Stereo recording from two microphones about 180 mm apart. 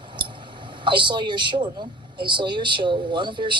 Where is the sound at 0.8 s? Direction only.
25° right (ahead or behind).